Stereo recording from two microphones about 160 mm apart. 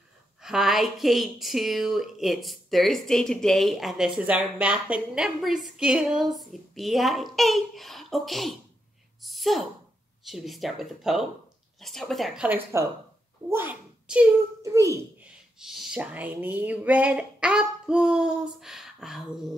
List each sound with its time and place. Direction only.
0.4 s a woman's voice: 5° right (ahead or behind)
9.2 s a sound: centre (ahead or behind)
10.2 s a woman's voice: centre (ahead or behind)
14.6 s a child's voice: 20° right (ahead or behind)
15.6 s a woman's voice: 5° right (ahead or behind)